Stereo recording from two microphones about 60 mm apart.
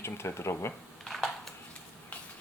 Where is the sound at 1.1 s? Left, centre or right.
Centre.